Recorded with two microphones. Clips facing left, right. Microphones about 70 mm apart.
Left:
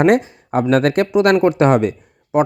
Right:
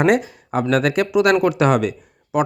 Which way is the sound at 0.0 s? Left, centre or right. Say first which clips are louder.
Left 3 dB; left.